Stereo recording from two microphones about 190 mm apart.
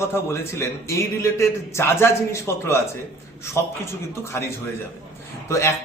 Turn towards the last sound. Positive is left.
turn(degrees=15)  # may be behind; listen again after turning